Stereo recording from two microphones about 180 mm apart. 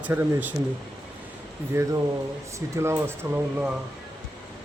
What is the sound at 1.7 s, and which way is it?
Speech, 15° right (ahead or behind).